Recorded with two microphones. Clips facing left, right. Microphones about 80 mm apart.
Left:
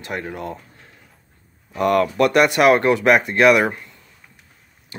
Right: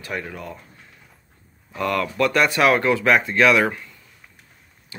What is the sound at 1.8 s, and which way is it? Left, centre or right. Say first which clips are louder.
Speech: left 5 dB; left.